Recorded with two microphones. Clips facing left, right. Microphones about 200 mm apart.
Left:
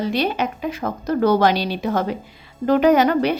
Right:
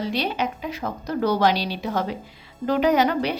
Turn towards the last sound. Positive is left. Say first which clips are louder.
# left 5 dB
turn(degrees=50)  # may be behind; listen again after turning